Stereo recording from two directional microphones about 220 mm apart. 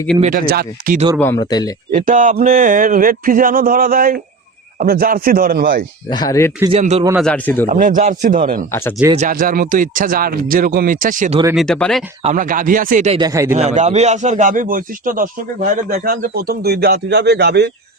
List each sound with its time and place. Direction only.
0.2 s a man's voice: 40° right (ahead or behind)
1.2 s speech: 15° left (ahead or behind)
1.9 s a man's voice: 35° right (ahead or behind)
6.1 s speech: 20° left (ahead or behind)
6.7 s a man's voice: 30° right (ahead or behind)
7.2 s speech: 5° left (ahead or behind)
7.7 s a man's voice: 35° right (ahead or behind)
8.7 s speech: 10° left (ahead or behind)
9.1 s a man's voice: 35° right (ahead or behind)
11.5 s speech: 5° left (ahead or behind)
12.2 s a man's voice: 35° right (ahead or behind)
13.1 s speech: 15° right (ahead or behind)
13.6 s a man's voice: 30° right (ahead or behind); by 17.7 s 50° right (ahead or behind)